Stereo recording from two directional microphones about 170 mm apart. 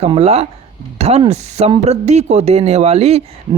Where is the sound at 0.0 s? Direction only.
35° right (ahead or behind).